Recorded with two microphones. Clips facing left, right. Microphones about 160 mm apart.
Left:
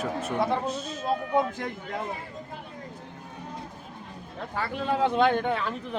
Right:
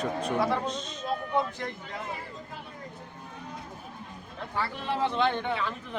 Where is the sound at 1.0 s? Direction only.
50° left (ahead or behind).